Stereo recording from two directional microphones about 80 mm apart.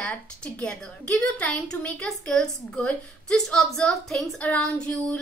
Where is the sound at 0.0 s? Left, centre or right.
Centre.